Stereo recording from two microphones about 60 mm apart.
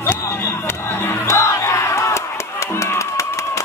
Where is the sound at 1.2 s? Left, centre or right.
Left.